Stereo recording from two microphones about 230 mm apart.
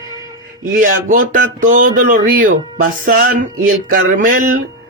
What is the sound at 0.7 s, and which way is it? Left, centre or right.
Speech, right.